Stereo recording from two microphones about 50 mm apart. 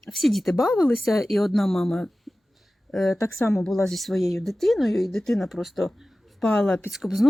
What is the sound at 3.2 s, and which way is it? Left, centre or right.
Speech, left.